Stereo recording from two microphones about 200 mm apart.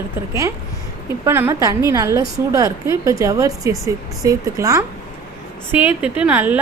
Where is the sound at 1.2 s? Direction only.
10° right (ahead or behind).